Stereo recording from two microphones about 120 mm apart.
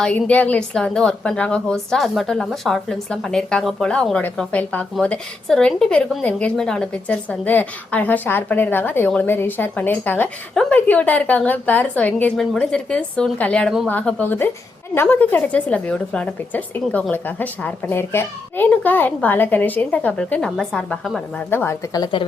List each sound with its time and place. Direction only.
0.0 s a woman's voice: 10° left (ahead or behind)
21.3 s a woman's voice: 20° left (ahead or behind)
21.9 s a woman's voice: 40° left (ahead or behind)